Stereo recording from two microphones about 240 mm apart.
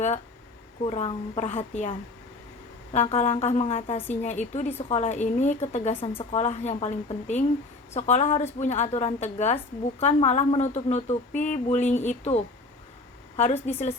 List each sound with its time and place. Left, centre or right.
0.9 s a woman's voice: left